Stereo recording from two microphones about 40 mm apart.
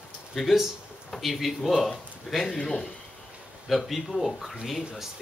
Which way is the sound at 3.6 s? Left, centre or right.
Centre.